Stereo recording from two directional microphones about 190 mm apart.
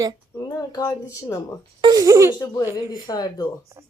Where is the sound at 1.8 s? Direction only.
20° right (ahead or behind).